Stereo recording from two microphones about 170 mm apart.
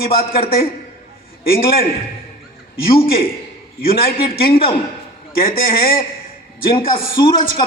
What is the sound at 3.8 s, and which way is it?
A man's voice, 60° left (ahead or behind).